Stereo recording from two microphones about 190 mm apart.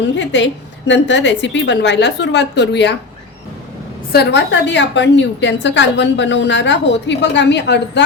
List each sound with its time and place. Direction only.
0.2 s a woman's voice: 70° left (ahead or behind)
4.1 s a woman's voice: 60° left (ahead or behind)